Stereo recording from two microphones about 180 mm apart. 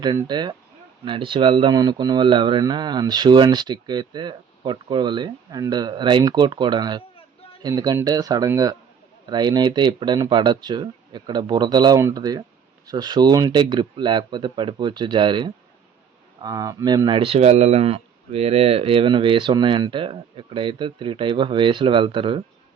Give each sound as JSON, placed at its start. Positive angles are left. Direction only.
{"t": 0.2, "sound": "speech", "side_deg": -25}